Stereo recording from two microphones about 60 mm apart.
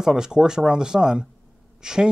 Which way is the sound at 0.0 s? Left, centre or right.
Centre.